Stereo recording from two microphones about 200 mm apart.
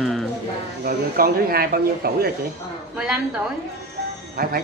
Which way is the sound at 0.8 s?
45° right (ahead or behind).